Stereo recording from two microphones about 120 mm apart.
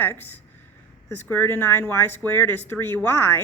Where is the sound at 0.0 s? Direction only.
15° left (ahead or behind).